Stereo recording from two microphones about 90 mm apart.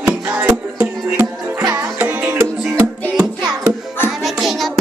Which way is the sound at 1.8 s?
15° right (ahead or behind).